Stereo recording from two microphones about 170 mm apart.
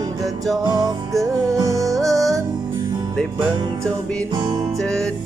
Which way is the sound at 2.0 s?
Centre (ahead or behind).